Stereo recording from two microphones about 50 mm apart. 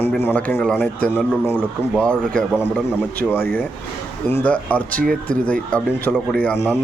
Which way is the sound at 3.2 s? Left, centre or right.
Left.